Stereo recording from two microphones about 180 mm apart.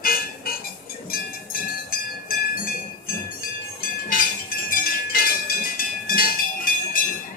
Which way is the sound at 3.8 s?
50° left (ahead or behind).